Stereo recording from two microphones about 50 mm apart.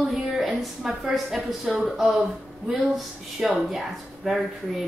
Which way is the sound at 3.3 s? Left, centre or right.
Centre.